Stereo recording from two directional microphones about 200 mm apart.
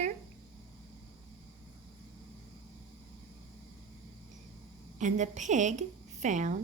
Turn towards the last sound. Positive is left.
turn(degrees=-35)  # may be behind; listen again after turning